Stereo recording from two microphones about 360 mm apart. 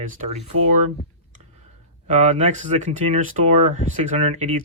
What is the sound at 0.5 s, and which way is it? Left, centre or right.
Speech, right.